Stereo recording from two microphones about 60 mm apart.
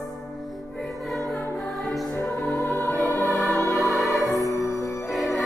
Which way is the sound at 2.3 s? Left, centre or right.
Left.